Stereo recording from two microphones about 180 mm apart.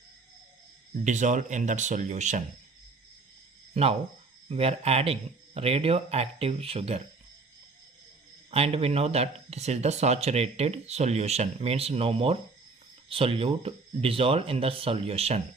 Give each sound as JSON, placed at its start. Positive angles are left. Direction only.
{"t": 1.0, "sound": "speech", "side_deg": -40}
{"t": 3.8, "sound": "speech", "side_deg": -35}
{"t": 8.4, "sound": "speech", "side_deg": -35}